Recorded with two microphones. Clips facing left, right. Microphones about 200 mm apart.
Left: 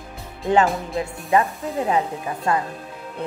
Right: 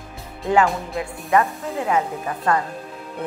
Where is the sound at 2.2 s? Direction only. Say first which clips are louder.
Right 1 dB; 20° left (ahead or behind).